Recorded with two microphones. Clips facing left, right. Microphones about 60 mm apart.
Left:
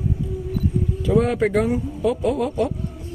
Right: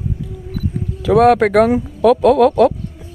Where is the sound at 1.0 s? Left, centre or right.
Right.